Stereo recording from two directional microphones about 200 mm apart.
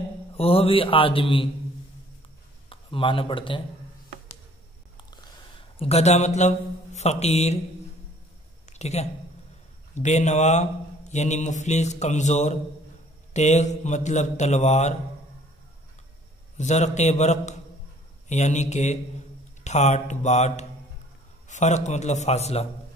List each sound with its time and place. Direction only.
0.4 s speech: 30° left (ahead or behind)
2.7 s speech: 25° left (ahead or behind)
5.1 s speech: 25° left (ahead or behind)
8.6 s a sound: 35° left (ahead or behind)
9.9 s speech: 35° left (ahead or behind)
16.5 s speech: 35° left (ahead or behind)